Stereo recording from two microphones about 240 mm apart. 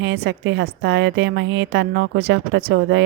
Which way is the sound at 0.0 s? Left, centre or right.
Right.